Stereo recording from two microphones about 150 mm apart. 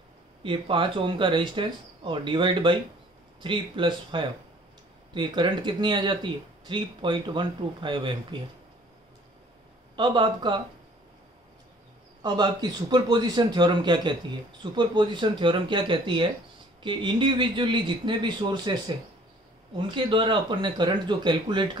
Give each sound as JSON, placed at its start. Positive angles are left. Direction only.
{"t": 0.4, "sound": "speech", "side_deg": -35}
{"t": 9.9, "sound": "speech", "side_deg": -30}
{"t": 12.2, "sound": "a man's voice", "side_deg": -30}
{"t": 19.9, "sound": "speech", "side_deg": -35}